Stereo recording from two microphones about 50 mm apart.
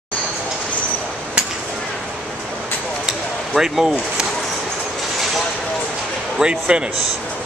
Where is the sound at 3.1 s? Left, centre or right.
Centre.